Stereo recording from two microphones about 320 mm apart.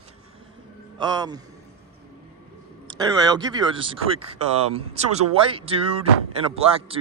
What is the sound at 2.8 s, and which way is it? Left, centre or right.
Speech, centre.